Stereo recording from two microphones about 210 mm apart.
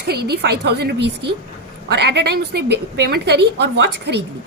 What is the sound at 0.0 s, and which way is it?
A woman's voice, 50° right (ahead or behind).